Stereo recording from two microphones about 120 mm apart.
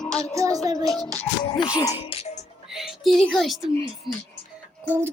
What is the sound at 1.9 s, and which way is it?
Music, 60° left (ahead or behind).